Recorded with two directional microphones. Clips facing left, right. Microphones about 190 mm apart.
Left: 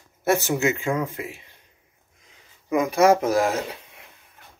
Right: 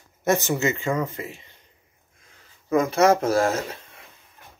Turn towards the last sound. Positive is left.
turn(degrees=15)  # may be behind; listen again after turning